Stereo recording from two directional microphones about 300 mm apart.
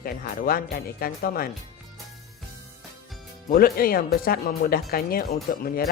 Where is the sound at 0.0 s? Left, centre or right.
Left.